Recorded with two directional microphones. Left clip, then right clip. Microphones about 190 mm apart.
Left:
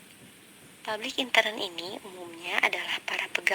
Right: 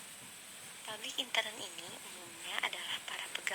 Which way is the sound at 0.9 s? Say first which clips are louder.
Left 10 dB; 40° left (ahead or behind).